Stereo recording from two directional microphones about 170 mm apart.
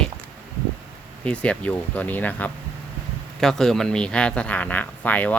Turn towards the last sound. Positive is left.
turn(degrees=10)  # may be behind; listen again after turning